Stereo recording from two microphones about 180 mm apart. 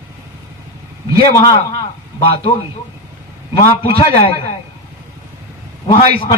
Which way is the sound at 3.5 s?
30° left (ahead or behind).